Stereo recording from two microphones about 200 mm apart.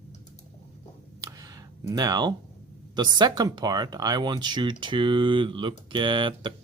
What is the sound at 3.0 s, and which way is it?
Speech, 20° right (ahead or behind).